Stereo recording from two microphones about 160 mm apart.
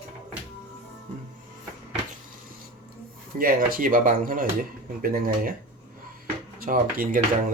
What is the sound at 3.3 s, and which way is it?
Speech, 60° right (ahead or behind).